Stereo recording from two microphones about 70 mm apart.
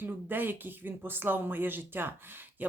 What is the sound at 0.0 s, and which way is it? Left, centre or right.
Speech, right.